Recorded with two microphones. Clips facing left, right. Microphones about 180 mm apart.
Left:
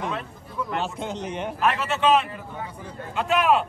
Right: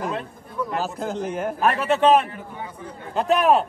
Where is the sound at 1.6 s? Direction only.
40° right (ahead or behind).